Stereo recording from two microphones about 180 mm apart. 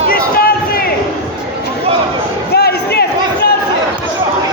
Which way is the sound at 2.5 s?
60° left (ahead or behind).